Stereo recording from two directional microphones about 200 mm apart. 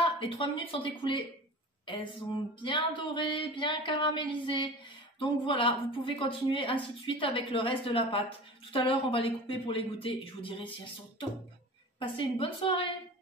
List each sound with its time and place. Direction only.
0.0 s speech: 25° left (ahead or behind)
12.0 s speech: 25° left (ahead or behind)